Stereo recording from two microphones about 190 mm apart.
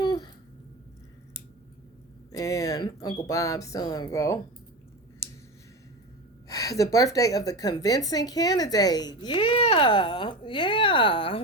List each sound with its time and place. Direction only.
0.0 s a sound: 25° left (ahead or behind)
2.3 s speech: 15° left (ahead or behind)
6.5 s a woman's voice: 20° left (ahead or behind)